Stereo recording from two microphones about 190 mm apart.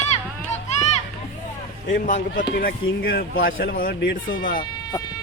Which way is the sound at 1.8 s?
45° left (ahead or behind).